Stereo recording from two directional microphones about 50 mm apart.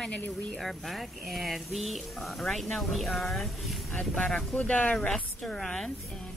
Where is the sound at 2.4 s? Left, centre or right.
Centre.